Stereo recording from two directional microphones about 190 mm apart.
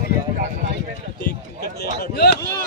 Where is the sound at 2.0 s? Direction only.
55° left (ahead or behind).